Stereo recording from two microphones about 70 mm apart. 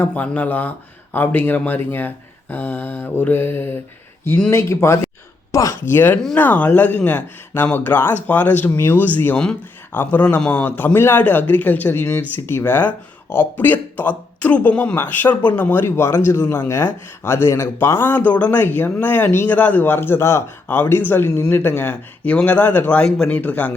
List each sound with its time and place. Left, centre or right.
0.0 s speech: left
5.5 s a sound: left
5.9 s speech: left
10.7 s speech: left
19.5 s speech: left
21.2 s speech: left
21.5 s speech: left
23.0 s speech: centre
23.3 s speech: left